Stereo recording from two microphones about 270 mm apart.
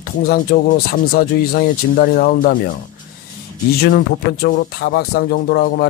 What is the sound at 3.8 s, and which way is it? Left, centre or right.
Speech, left.